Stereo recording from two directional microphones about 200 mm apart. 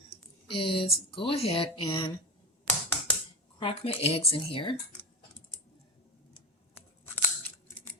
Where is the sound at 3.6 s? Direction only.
30° left (ahead or behind).